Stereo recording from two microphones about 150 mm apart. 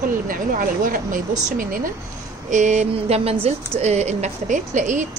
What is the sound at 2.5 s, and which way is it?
A woman's voice, 50° right (ahead or behind).